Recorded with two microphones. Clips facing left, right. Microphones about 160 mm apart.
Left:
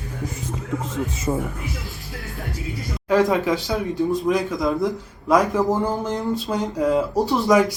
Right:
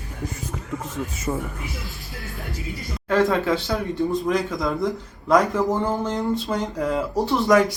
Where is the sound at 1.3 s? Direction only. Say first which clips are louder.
Left 3 dB; 20° left (ahead or behind).